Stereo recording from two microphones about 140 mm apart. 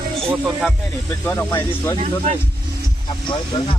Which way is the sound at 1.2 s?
20° left (ahead or behind).